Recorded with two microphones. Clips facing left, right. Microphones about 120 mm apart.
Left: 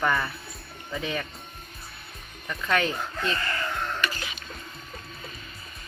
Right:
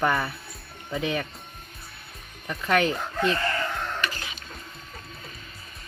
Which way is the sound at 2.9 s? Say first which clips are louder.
Right 4 dB; 70° right (ahead or behind).